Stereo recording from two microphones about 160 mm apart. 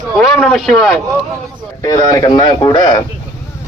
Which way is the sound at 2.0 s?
25° left (ahead or behind).